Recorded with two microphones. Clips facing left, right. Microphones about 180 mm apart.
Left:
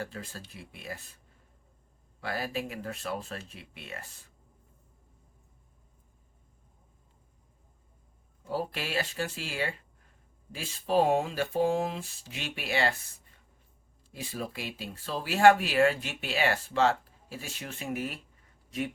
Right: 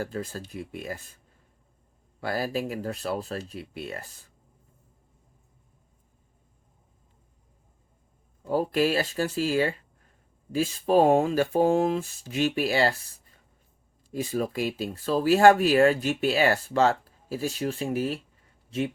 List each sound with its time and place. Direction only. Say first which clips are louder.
0.0 s speech: right 7 dB; 45° right (ahead or behind)
2.2 s speech: right 5 dB; 40° right (ahead or behind)
8.4 s speech: right 10 dB; 45° right (ahead or behind)
14.1 s speech: right 9 dB; 45° right (ahead or behind); by 18.2 s 30° right (ahead or behind)